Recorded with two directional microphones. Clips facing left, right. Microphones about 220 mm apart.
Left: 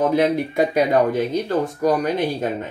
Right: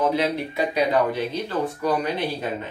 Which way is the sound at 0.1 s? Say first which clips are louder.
Left 5 dB; 50° left (ahead or behind).